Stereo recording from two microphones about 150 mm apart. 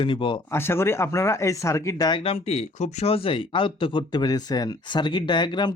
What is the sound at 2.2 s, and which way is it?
Speech, 45° left (ahead or behind).